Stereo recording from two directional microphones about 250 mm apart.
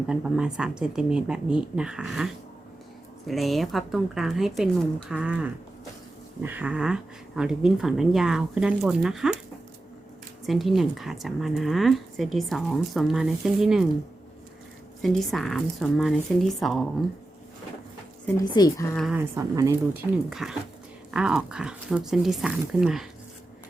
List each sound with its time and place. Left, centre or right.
0.1 s a woman's voice: centre
10.4 s a woman's voice: centre
15.0 s a woman's voice: centre
18.3 s speech: centre
18.9 s a woman's voice: centre